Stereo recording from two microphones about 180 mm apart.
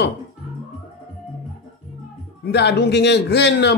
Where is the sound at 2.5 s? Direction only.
70° left (ahead or behind).